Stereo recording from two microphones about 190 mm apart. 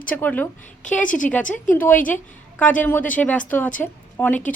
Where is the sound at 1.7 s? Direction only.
10° left (ahead or behind).